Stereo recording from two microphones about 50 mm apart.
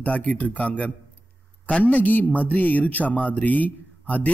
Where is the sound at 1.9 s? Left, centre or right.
Left.